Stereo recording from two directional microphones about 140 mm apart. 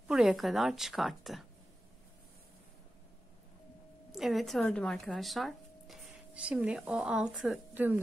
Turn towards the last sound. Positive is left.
turn(degrees=-15)  # may be behind; listen again after turning